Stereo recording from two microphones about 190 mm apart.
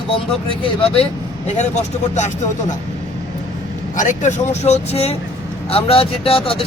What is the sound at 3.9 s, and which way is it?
Speech, 40° left (ahead or behind).